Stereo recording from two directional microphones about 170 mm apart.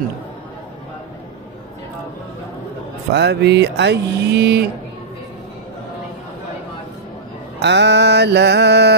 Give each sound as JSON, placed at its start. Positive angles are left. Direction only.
{"t": 3.1, "sound": "speech", "side_deg": -90}
{"t": 7.6, "sound": "mantra", "side_deg": -90}